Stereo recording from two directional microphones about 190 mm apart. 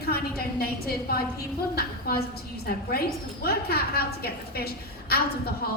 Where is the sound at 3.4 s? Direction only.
55° left (ahead or behind).